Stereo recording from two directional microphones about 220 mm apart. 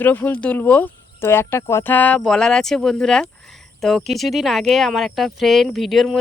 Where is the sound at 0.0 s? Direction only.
10° left (ahead or behind).